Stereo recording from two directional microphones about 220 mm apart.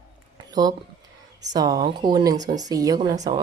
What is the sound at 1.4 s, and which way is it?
Speech, 15° right (ahead or behind).